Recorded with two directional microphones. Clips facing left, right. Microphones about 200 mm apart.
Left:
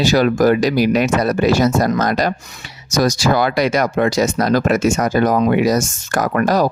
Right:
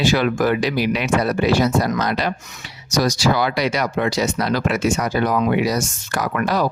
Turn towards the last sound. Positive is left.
turn(degrees=45)  # may be behind; listen again after turning